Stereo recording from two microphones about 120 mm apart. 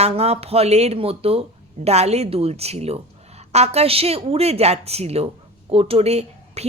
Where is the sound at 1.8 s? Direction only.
65° right (ahead or behind).